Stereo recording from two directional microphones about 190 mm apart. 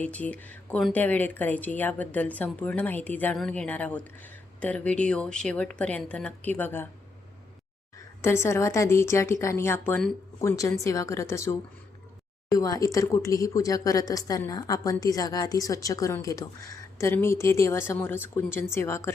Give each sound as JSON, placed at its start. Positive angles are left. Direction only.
{"t": 0.0, "sound": "speech", "side_deg": 5}
{"t": 8.2, "sound": "speech", "side_deg": 15}